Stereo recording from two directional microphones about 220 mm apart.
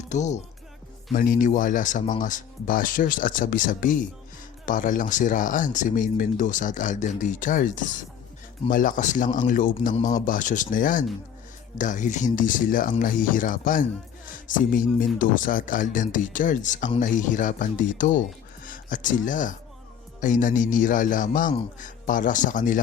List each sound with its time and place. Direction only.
0.1 s speech: 30° left (ahead or behind)